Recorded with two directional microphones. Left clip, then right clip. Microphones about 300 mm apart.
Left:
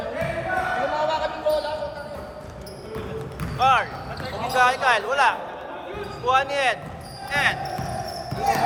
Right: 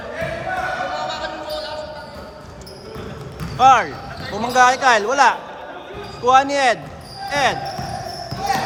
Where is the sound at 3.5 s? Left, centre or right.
Right.